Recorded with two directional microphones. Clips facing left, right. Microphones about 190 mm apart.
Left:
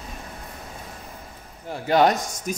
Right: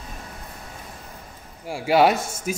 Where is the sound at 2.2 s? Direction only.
15° left (ahead or behind).